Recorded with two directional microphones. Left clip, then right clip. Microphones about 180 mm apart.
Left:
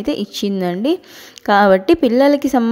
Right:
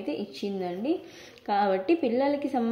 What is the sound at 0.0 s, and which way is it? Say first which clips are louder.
A woman's voice: left 12 dB; 50° left (ahead or behind).